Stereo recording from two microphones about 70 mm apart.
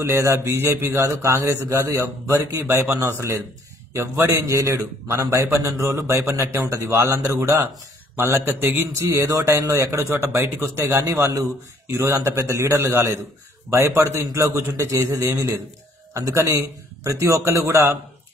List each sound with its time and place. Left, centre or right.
0.1 s a man's voice: right
8.9 s a man's voice: right